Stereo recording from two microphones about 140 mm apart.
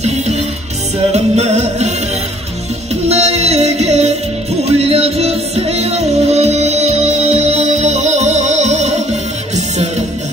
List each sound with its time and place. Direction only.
0.0 s music: 50° right (ahead or behind)
3.1 s music: 50° right (ahead or behind)